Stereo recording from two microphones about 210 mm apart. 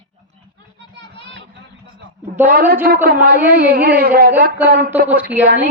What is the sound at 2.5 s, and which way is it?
Speech, 40° right (ahead or behind).